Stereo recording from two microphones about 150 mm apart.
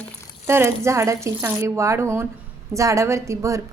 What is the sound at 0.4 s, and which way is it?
A woman's voice, 15° right (ahead or behind).